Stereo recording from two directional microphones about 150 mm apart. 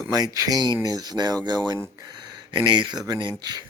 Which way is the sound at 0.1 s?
25° right (ahead or behind).